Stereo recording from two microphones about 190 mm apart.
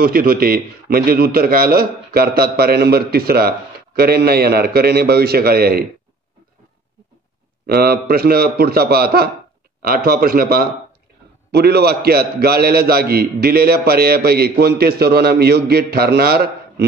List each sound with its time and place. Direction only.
0.0 s a man's voice: 50° right (ahead or behind)
7.6 s a man's voice: 55° right (ahead or behind)